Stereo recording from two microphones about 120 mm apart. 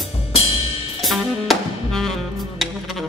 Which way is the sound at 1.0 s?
Centre (ahead or behind).